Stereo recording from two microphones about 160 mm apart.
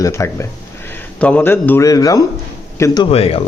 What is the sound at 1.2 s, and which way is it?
A man's voice, 10° left (ahead or behind).